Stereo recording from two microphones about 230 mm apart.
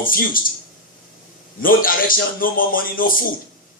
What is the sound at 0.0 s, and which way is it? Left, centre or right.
Speech, left.